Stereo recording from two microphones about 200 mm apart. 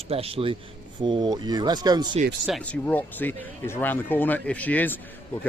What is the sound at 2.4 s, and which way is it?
Speech, 5° left (ahead or behind).